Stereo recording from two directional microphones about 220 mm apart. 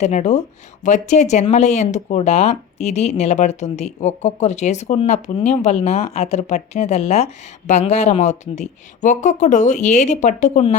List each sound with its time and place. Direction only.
0.0 s speech: 30° left (ahead or behind)